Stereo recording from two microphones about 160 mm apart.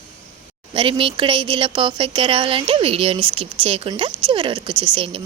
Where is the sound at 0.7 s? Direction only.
35° right (ahead or behind).